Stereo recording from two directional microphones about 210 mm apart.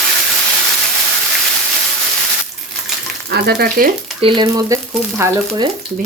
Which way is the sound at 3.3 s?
50° right (ahead or behind).